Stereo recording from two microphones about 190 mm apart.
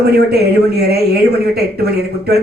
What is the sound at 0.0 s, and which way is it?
A man's voice, 55° right (ahead or behind).